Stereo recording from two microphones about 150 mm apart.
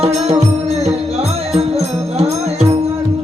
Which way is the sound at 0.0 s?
45° right (ahead or behind).